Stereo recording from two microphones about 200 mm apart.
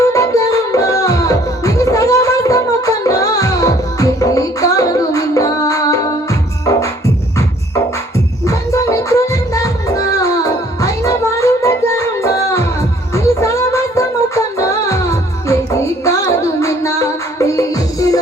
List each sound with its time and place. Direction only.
0.1 s music: 15° left (ahead or behind)
8.4 s music: 15° left (ahead or behind)